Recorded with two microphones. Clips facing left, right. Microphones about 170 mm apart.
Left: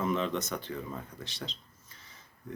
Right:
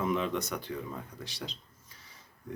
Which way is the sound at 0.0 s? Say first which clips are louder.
Even; 10° right (ahead or behind).